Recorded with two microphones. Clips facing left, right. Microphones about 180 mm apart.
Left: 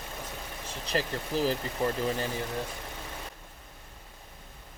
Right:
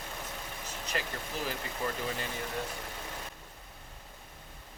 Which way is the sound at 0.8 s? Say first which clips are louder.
Left 6 dB; 35° left (ahead or behind).